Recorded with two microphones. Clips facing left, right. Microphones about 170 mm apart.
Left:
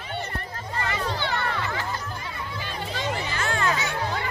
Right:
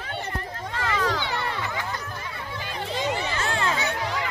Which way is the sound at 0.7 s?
90° right.